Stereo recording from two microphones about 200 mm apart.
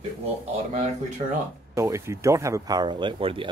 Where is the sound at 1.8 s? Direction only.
15° right (ahead or behind).